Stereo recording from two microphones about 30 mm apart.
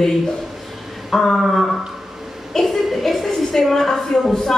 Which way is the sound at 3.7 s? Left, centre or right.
Centre.